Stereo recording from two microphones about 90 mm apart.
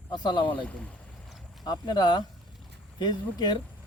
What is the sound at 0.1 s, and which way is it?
Speech, 55° left (ahead or behind).